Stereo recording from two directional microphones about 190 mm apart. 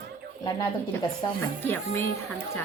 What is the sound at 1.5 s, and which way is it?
Speech, 10° left (ahead or behind).